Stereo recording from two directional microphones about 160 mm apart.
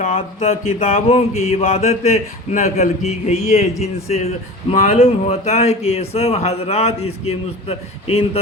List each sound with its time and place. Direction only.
0.0 s a man's voice: 40° left (ahead or behind)
4.7 s speech: 60° left (ahead or behind)
4.9 s a man's voice: 40° left (ahead or behind)